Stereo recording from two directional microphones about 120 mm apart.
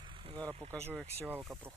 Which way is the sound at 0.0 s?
40° right (ahead or behind).